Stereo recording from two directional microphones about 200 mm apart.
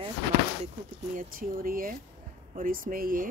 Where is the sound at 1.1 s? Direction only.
45° right (ahead or behind).